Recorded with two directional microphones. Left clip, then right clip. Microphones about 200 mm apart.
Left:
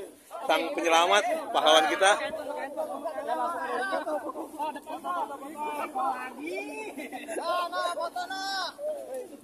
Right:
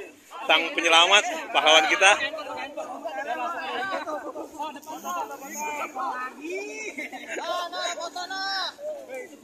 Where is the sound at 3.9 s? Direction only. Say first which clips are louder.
Even; 35° left (ahead or behind).